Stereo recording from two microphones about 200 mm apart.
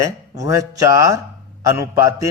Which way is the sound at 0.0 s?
15° right (ahead or behind).